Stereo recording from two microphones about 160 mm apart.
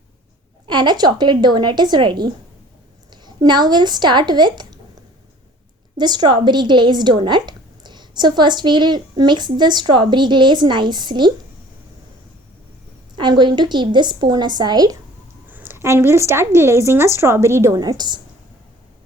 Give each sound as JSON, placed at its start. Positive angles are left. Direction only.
{"t": 0.7, "sound": "a woman's voice", "side_deg": -25}
{"t": 6.0, "sound": "a woman's voice", "side_deg": -25}
{"t": 13.1, "sound": "a woman's voice", "side_deg": -30}
{"t": 15.4, "sound": "a woman's voice", "side_deg": -10}